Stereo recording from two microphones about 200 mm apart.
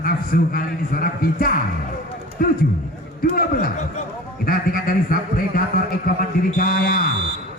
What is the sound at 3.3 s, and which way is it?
A man's voice, 45° left (ahead or behind).